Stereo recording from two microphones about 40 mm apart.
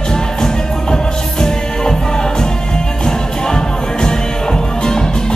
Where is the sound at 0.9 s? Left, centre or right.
Centre.